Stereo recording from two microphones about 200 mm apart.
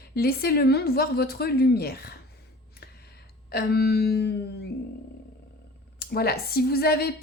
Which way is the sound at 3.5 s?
50° left (ahead or behind).